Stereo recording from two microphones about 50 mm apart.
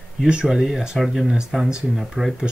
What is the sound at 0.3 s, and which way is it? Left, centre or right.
Speech, centre.